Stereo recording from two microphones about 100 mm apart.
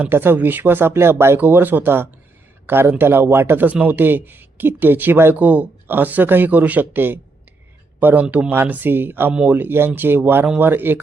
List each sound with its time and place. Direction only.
0.0 s speech: 20° right (ahead or behind)